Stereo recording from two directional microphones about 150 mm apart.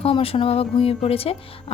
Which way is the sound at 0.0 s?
40° left (ahead or behind).